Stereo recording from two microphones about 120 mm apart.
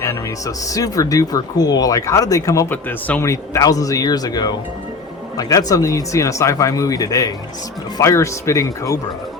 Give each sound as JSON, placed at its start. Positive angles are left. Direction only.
{"t": 0.0, "sound": "speech", "side_deg": 25}